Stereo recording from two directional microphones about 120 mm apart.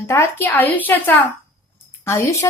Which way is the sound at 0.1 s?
20° left (ahead or behind).